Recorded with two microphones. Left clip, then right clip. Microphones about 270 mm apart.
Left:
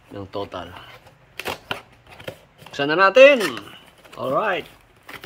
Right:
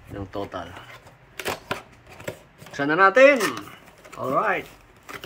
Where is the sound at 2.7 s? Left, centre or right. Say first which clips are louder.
Left 3 dB; left.